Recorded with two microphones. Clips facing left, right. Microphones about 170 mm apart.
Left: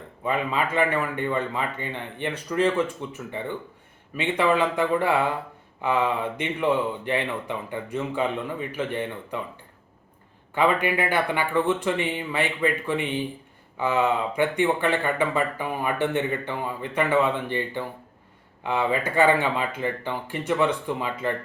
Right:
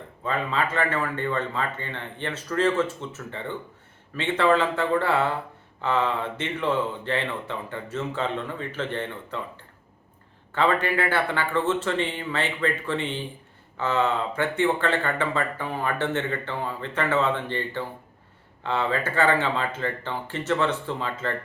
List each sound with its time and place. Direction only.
0.3 s speech: 15° left (ahead or behind)
10.5 s speech: 15° left (ahead or behind)